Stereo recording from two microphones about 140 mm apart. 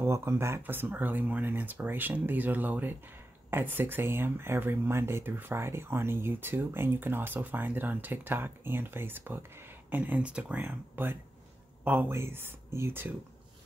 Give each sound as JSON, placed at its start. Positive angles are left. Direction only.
{"t": 0.0, "sound": "speech", "side_deg": -20}